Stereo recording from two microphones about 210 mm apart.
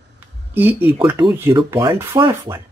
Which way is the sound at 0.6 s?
10° right (ahead or behind).